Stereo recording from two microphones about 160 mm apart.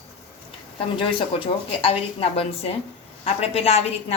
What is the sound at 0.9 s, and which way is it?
A woman's voice, 35° left (ahead or behind).